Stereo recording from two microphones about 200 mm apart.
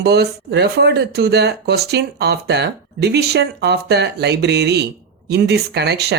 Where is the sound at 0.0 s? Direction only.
55° right (ahead or behind).